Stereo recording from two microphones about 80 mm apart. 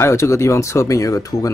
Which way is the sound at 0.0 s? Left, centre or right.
Left.